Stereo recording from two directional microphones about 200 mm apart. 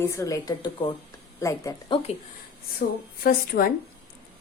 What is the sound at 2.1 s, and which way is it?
Speech, 35° left (ahead or behind).